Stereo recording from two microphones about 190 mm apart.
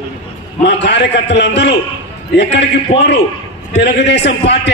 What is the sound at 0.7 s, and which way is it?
A man's voice, 65° left (ahead or behind).